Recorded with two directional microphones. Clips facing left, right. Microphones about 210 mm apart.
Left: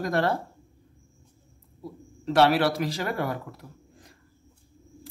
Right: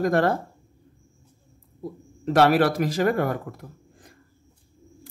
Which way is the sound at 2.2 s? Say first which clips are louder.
Right 3 dB; 50° right (ahead or behind).